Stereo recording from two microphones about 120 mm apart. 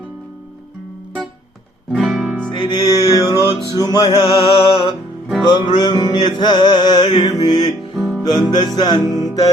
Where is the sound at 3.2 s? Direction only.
30° left (ahead or behind).